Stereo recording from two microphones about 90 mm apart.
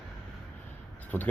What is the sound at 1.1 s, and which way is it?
Speech, 20° left (ahead or behind).